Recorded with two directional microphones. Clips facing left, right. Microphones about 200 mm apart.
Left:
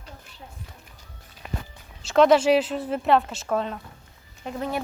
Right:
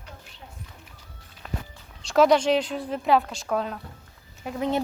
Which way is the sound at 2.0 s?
Centre (ahead or behind).